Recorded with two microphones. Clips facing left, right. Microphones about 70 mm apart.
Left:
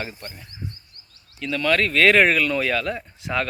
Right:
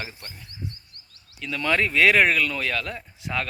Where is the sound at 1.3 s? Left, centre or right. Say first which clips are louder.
Left 5 dB; centre.